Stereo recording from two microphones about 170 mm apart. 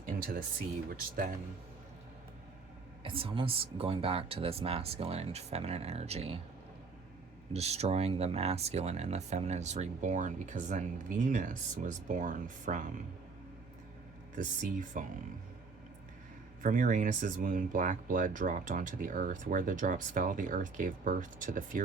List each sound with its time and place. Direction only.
0.0 s a sound: 55° right (ahead or behind)
0.9 s speech: 60° right (ahead or behind)
3.0 s speech: 30° right (ahead or behind)
7.5 s speech: 40° right (ahead or behind)
14.3 s speech: 50° right (ahead or behind)
16.6 s speech: 50° right (ahead or behind)